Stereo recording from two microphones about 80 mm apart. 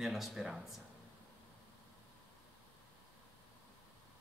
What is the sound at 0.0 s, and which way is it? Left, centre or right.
Speech, centre.